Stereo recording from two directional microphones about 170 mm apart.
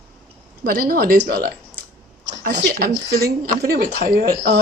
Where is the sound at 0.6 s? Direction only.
65° right (ahead or behind).